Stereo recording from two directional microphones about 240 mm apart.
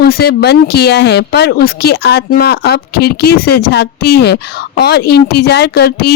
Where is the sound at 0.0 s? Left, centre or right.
Left.